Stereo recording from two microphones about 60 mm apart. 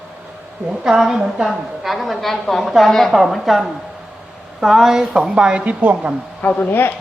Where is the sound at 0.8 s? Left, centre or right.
Centre.